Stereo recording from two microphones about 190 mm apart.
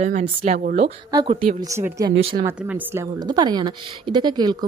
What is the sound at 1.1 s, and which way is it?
Speech, 25° right (ahead or behind).